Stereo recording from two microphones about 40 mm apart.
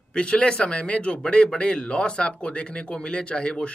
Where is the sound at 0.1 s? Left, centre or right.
Left.